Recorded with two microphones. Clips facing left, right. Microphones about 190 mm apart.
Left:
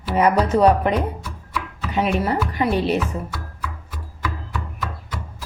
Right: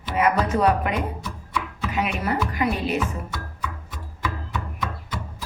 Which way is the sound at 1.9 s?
30° left (ahead or behind).